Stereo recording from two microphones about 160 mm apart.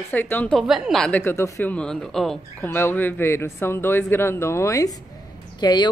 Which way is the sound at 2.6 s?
15° left (ahead or behind).